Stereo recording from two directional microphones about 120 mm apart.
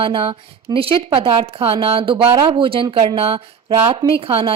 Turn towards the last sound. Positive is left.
turn(degrees=-50)  # may be behind; listen again after turning